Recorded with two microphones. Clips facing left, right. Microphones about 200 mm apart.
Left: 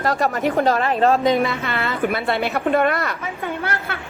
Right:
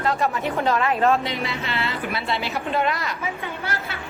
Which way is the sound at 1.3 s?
50° left (ahead or behind).